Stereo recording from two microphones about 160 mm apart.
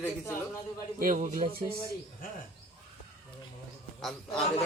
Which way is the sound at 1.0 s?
55° right (ahead or behind).